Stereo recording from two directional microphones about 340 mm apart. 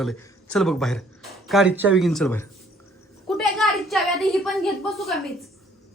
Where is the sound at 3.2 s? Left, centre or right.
Centre.